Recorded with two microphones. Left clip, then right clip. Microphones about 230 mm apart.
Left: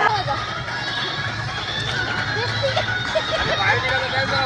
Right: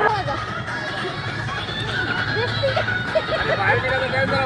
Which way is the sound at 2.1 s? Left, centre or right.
Left.